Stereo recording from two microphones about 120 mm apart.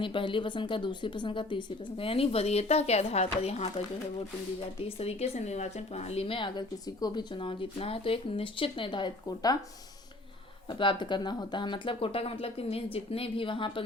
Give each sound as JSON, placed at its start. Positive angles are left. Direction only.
{"t": 0.0, "sound": "speech", "side_deg": 45}
{"t": 4.9, "sound": "speech", "side_deg": 60}
{"t": 10.7, "sound": "speech", "side_deg": 45}